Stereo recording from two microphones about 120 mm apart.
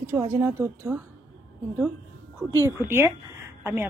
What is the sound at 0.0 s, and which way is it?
Speech, 20° right (ahead or behind).